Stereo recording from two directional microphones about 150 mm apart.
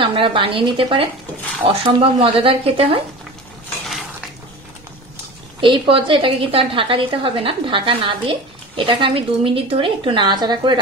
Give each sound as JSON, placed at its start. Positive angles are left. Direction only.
{"t": 0.0, "sound": "a woman's voice", "side_deg": -35}
{"t": 5.6, "sound": "a woman's voice", "side_deg": -35}